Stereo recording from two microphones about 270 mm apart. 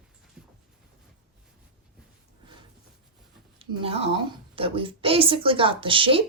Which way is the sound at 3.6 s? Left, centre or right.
Right.